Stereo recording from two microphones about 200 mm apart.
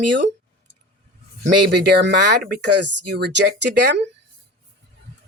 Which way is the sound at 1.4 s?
55° right (ahead or behind).